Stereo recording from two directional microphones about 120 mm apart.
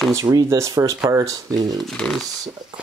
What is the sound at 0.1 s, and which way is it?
Speech, 30° right (ahead or behind).